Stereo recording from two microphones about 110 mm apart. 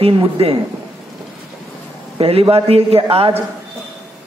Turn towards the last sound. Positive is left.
turn(degrees=-60)  # may be behind; listen again after turning